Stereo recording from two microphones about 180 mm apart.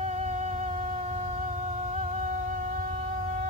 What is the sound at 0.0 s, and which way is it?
Music, 35° right (ahead or behind).